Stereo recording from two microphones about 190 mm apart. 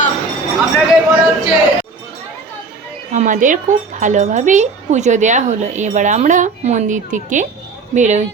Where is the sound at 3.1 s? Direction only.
40° right (ahead or behind).